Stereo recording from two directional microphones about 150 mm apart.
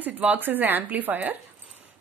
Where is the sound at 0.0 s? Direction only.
10° right (ahead or behind).